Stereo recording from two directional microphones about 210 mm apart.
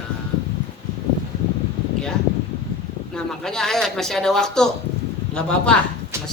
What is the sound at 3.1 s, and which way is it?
Speech, 5° left (ahead or behind).